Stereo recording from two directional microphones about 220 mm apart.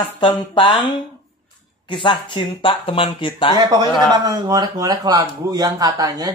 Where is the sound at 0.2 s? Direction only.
20° left (ahead or behind).